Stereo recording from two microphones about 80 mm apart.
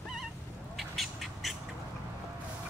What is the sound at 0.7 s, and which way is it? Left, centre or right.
Bird, centre.